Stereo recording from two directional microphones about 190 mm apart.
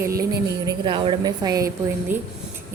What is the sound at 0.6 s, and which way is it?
A woman's voice, 25° right (ahead or behind).